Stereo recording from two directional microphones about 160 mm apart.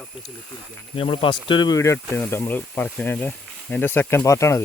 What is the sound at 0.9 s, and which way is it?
Speech, 35° left (ahead or behind).